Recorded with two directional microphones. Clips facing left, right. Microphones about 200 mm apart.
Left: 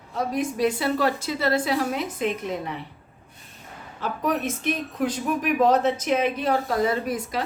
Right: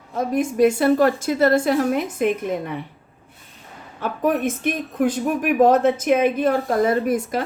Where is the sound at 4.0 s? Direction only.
55° right (ahead or behind).